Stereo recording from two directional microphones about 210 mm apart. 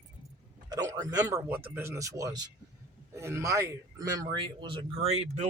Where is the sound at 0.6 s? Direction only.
15° right (ahead or behind).